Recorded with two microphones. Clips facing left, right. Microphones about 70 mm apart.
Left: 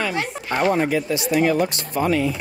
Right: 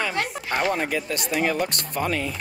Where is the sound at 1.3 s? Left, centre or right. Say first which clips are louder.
Left 5 dB; left.